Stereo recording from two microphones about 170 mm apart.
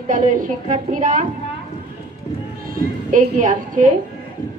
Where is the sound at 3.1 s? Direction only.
50° right (ahead or behind).